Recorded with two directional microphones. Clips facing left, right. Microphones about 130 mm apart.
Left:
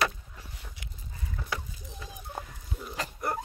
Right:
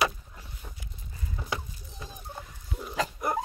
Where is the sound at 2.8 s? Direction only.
15° right (ahead or behind).